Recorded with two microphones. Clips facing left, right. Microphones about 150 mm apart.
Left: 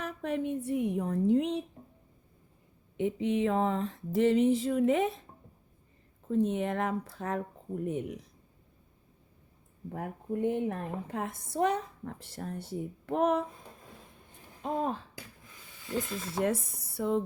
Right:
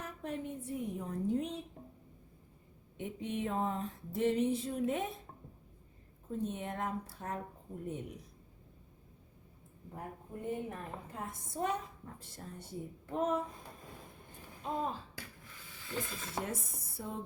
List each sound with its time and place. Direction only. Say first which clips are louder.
0.0 s a woman's voice: left 8 dB; 75° left (ahead or behind)
3.0 s a sound: left 9 dB; 90° left
6.3 s a sound: left 9 dB; 90° left
9.9 s a woman's voice: left 10 dB; 75° left (ahead or behind)
14.6 s speech: left 5 dB; 60° left (ahead or behind)
16.4 s speech: left 11 dB; 85° left